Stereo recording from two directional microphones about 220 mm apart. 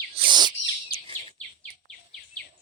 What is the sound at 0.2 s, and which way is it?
Bird vocalization, 20° right (ahead or behind).